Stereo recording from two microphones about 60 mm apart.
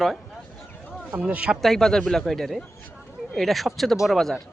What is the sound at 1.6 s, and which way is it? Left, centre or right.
Speech, centre.